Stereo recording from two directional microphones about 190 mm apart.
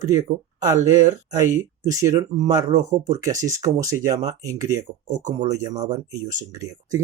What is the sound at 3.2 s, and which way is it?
Speech, 15° right (ahead or behind).